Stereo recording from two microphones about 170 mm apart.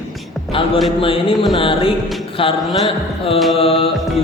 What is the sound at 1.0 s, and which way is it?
Speech, 30° left (ahead or behind).